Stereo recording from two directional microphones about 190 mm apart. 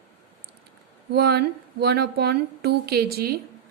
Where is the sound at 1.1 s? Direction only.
55° right (ahead or behind).